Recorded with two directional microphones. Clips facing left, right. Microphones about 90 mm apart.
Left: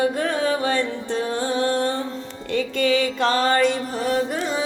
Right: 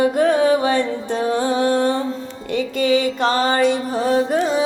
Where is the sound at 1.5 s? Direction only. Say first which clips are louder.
Right 2 dB; 30° right (ahead or behind).